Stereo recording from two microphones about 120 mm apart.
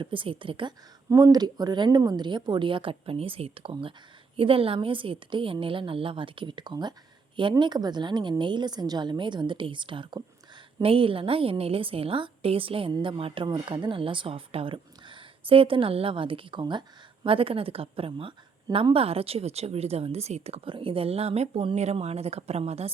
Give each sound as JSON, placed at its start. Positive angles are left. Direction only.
{"t": 0.0, "sound": "a woman's voice", "side_deg": -45}
{"t": 1.1, "sound": "a woman's voice", "side_deg": -30}